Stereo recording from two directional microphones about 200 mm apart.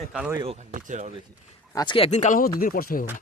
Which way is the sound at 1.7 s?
20° left (ahead or behind).